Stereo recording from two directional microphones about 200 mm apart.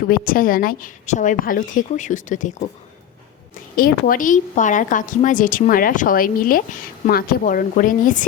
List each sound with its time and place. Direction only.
0.1 s a woman's voice: 45° left (ahead or behind)
3.8 s a woman's voice: 45° left (ahead or behind)